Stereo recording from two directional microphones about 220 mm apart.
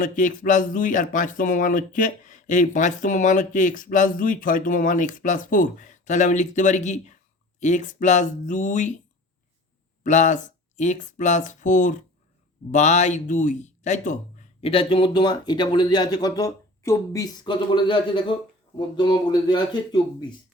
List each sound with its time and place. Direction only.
0.0 s speech: 35° left (ahead or behind)
10.0 s speech: 35° left (ahead or behind)